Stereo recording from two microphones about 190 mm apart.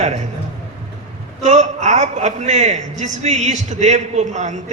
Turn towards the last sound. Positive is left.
turn(degrees=-40)  # may be behind; listen again after turning